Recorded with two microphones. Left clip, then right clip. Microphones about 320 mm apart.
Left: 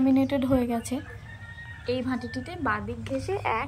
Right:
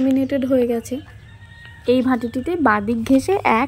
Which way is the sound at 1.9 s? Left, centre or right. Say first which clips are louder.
Right 12 dB; centre.